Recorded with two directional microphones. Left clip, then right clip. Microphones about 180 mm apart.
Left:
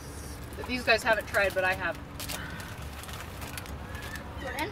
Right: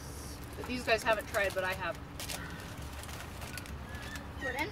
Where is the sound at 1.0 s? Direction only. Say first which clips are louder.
Left 5 dB; 5° left (ahead or behind).